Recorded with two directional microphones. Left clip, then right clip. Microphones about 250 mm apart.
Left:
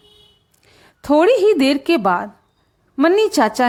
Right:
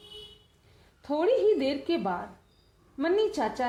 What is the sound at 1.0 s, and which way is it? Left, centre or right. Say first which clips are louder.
A woman's voice: left 12 dB; left.